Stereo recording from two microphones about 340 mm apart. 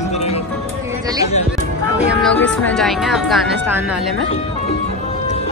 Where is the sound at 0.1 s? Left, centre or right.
Centre.